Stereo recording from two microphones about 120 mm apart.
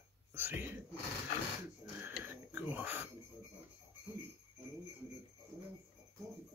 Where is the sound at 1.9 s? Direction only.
15° right (ahead or behind).